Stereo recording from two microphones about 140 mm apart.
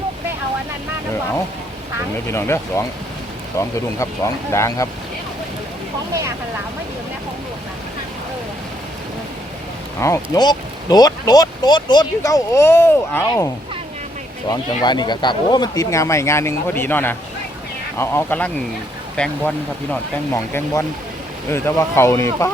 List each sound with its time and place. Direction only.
2.2 s speech: 20° left (ahead or behind)
3.9 s speech: 20° left (ahead or behind)
10.0 s speech: 20° left (ahead or behind)
14.5 s speech: 30° left (ahead or behind); by 20.0 s 5° left (ahead or behind)
20.3 s speech: 20° left (ahead or behind)